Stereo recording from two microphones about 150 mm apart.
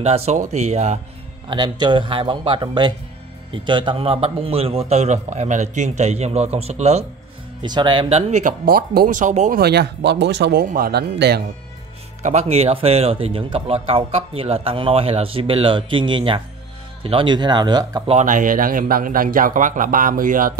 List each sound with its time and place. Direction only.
0.0 s a man's voice: 45° right (ahead or behind)
1.5 s a man's voice: 30° right (ahead or behind)
7.6 s speech: 30° right (ahead or behind)
8.1 s a man's voice: 50° right (ahead or behind)
8.6 s speech: 75° right (ahead or behind); by 9.6 s 55° right (ahead or behind)
9.6 s speech: 90° right
10.5 s speech: 75° right (ahead or behind)
12.2 s speech: 50° right (ahead or behind); by 18.0 s 25° right (ahead or behind)
18.0 s a man's voice: 50° right (ahead or behind)